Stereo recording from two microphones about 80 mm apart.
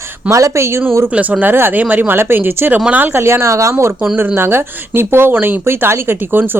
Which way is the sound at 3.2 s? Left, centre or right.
Right.